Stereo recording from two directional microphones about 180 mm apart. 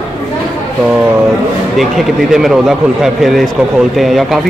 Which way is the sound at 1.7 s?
Centre (ahead or behind).